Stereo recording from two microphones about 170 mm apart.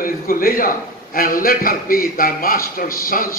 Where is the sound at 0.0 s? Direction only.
60° left (ahead or behind).